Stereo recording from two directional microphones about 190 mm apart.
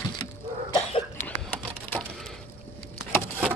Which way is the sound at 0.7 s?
30° left (ahead or behind).